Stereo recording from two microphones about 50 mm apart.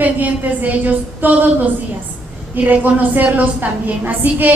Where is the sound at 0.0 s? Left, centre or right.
Right.